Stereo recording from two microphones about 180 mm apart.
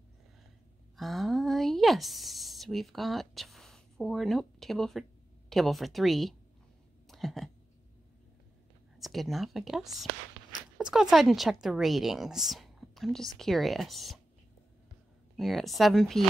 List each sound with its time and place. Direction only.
0.9 s speech: centre (ahead or behind)
7.1 s a sound: centre (ahead or behind)
8.9 s speech: centre (ahead or behind)
15.3 s speech: centre (ahead or behind)